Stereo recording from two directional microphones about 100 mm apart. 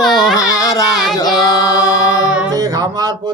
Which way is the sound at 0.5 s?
35° left (ahead or behind).